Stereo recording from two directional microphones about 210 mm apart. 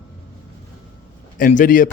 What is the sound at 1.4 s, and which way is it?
Speech, 40° left (ahead or behind).